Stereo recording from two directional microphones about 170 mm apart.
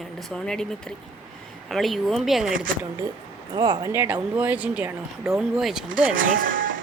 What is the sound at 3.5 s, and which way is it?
Speech, 25° right (ahead or behind).